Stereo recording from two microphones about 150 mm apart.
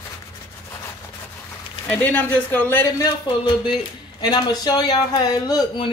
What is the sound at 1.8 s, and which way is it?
Speech, 10° left (ahead or behind).